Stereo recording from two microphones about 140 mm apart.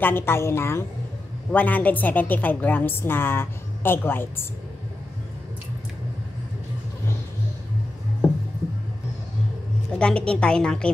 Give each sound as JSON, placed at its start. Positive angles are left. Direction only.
{"t": 0.0, "sound": "a woman's voice", "side_deg": 15}
{"t": 9.9, "sound": "a woman's voice", "side_deg": 5}